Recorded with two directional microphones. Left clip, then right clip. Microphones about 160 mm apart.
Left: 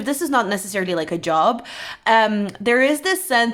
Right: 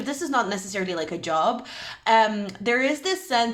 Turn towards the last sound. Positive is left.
turn(degrees=40)  # may be behind; listen again after turning